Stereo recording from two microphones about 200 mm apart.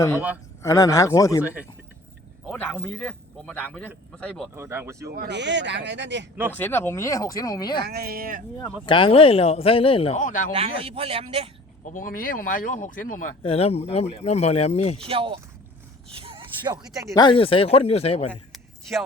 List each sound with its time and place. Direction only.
0.6 s speech: 15° left (ahead or behind)
2.5 s speech: 10° left (ahead or behind)
4.5 s speech: 15° right (ahead or behind)
5.0 s speech: 50° right (ahead or behind)
6.5 s speech: 10° left (ahead or behind)
7.9 s speech: 50° right (ahead or behind)
8.9 s speech: 25° left (ahead or behind)
10.5 s a man's voice: 30° right (ahead or behind)
11.9 s speech: 45° left (ahead or behind)
13.4 s speech: 30° left (ahead or behind)
14.9 s a man's voice: 30° right (ahead or behind)
16.1 s a sound: 25° right (ahead or behind)
17.2 s speech: 25° left (ahead or behind)
18.3 s a sound: centre (ahead or behind)